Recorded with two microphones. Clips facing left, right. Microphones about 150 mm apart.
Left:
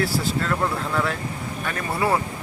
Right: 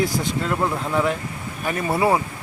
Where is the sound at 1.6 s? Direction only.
25° right (ahead or behind).